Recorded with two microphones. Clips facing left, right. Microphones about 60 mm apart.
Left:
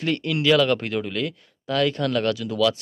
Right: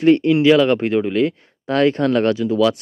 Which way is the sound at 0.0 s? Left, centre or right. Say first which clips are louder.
Right 10 dB; right.